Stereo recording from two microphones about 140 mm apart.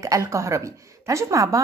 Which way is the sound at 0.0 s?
20° right (ahead or behind).